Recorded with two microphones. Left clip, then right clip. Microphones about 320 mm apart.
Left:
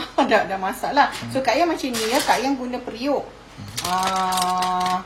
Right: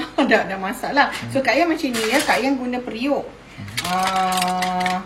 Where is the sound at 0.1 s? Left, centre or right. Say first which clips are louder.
Even; centre.